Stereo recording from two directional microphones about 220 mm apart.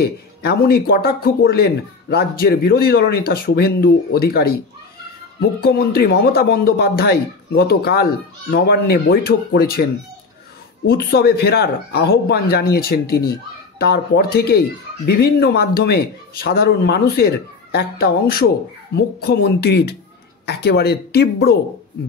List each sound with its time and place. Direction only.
0.0 s speech: 45° left (ahead or behind)
5.6 s speech: 45° left (ahead or behind)
10.9 s speech: 45° left (ahead or behind)